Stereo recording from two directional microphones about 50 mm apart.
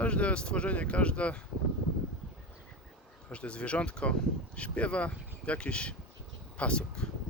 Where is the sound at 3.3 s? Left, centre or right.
Left.